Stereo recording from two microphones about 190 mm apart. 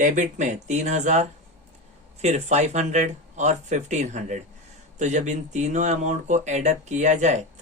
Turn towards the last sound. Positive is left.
turn(degrees=-40)  # may be behind; listen again after turning